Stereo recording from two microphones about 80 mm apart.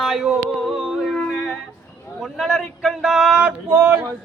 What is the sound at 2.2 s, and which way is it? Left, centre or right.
A man's voice, centre.